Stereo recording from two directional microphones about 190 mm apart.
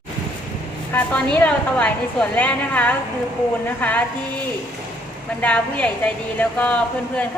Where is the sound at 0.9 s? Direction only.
10° left (ahead or behind).